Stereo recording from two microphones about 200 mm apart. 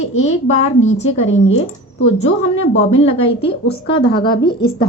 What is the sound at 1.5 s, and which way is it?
Speech, 75° left (ahead or behind).